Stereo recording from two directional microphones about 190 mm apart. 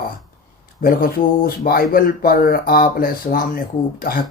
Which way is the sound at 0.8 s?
50° left (ahead or behind).